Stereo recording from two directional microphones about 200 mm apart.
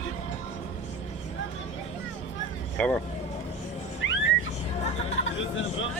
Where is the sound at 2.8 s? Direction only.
5° left (ahead or behind).